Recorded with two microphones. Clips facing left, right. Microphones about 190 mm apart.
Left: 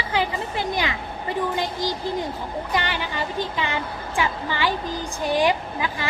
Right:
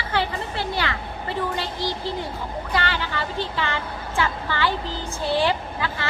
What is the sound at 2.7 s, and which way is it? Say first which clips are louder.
A woman's voice: right 1 dB; 15° left (ahead or behind).